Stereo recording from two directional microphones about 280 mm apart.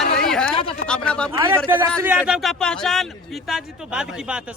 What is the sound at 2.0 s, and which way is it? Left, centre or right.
A man's voice, centre.